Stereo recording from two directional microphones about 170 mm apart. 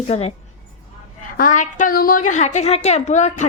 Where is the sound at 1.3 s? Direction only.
50° left (ahead or behind).